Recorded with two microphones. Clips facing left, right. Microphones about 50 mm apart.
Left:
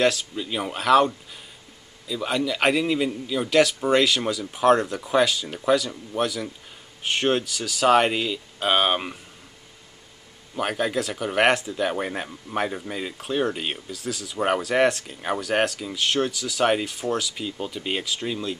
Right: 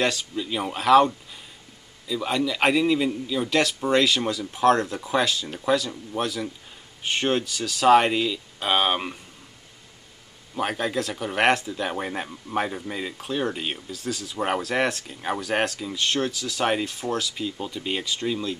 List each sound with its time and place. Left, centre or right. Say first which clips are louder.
0.0 s a man's voice: left 3 dB; centre
10.5 s a man's voice: left 1 dB; centre